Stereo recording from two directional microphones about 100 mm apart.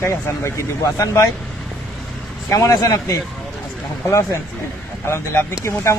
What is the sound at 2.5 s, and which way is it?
Speech, 35° left (ahead or behind).